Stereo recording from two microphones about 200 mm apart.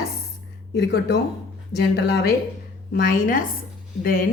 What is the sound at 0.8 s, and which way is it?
A woman's voice, 55° left (ahead or behind).